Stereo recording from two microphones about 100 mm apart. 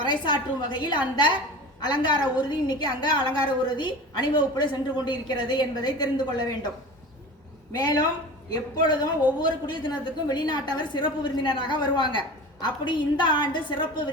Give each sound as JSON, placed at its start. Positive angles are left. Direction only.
{"t": 0.0, "sound": "a woman's voice", "side_deg": 50}
{"t": 7.7, "sound": "a woman's voice", "side_deg": 40}